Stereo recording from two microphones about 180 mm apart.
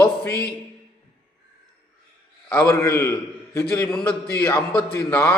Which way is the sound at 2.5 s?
15° left (ahead or behind).